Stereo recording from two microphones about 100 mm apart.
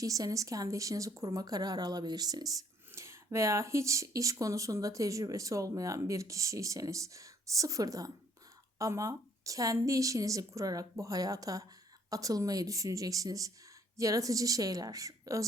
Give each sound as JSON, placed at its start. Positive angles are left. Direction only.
{"t": 0.0, "sound": "speech", "side_deg": -35}